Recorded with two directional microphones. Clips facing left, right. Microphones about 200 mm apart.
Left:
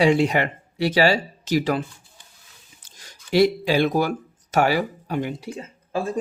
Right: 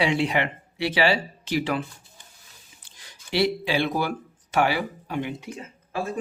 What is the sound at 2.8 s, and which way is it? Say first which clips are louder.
Speech: left 4 dB; 45° left (ahead or behind).